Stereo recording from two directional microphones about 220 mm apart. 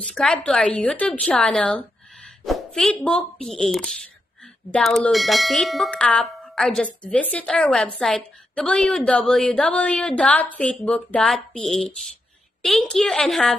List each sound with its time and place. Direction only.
0.0 s bell: centre (ahead or behind)
2.4 s speech: centre (ahead or behind)
4.6 s bell: 5° left (ahead or behind)